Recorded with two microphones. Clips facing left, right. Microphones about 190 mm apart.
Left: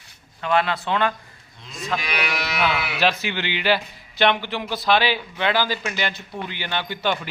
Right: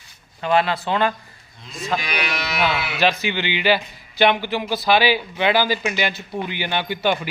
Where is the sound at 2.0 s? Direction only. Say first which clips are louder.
Right 1 dB; centre (ahead or behind).